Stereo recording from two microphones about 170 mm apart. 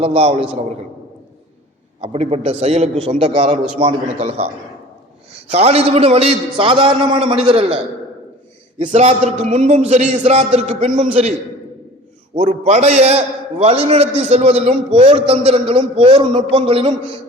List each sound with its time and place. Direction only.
0.0 s a man's voice: 35° right (ahead or behind)
2.0 s a man's voice: 40° right (ahead or behind)
5.5 s a man's voice: 40° right (ahead or behind)
8.8 s a man's voice: 30° right (ahead or behind)
12.4 s a man's voice: 45° right (ahead or behind)